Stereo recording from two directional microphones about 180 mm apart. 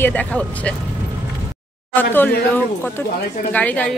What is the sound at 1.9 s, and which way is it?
Speech, 10° left (ahead or behind).